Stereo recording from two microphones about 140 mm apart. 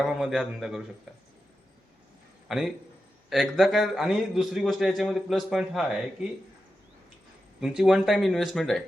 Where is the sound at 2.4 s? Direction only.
Centre (ahead or behind).